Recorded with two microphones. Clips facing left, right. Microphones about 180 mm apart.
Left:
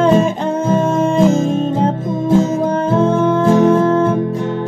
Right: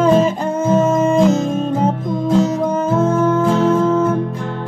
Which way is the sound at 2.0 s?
20° left (ahead or behind).